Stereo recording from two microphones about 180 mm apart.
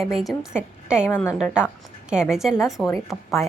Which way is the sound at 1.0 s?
15° left (ahead or behind).